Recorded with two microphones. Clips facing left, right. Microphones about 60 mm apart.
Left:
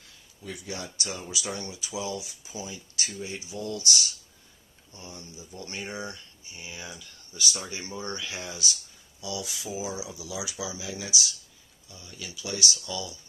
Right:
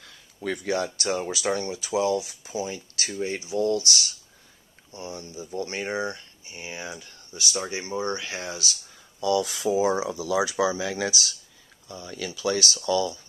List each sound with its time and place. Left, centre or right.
0.0 s a sound: right
0.6 s speech: right
7.9 s speech: right
9.2 s speech: right